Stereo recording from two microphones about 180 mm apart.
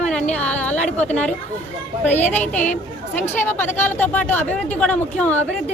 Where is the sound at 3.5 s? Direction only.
10° left (ahead or behind).